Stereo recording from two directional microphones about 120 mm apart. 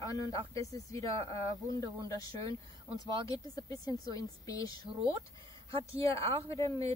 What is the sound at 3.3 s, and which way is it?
Speech, 30° left (ahead or behind).